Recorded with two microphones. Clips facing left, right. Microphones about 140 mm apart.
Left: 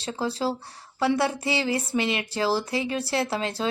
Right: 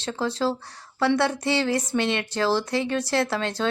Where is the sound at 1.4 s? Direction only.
5° left (ahead or behind).